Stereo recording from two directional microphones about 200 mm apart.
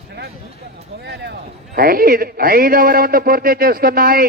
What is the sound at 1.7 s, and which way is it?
A man's voice, 45° right (ahead or behind).